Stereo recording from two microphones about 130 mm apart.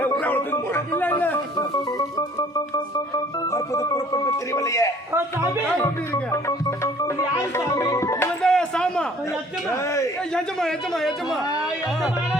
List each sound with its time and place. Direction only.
0.0 s a sound: 15° left (ahead or behind)
1.5 s organ: 30° left (ahead or behind)
3.5 s music: 25° left (ahead or behind)
6.3 s music: 25° left (ahead or behind)
8.4 s speech: 5° left (ahead or behind)
10.3 s a man's voice: 5° left (ahead or behind)